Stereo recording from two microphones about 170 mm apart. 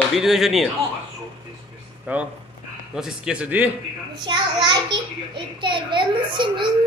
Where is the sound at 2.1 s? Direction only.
10° right (ahead or behind).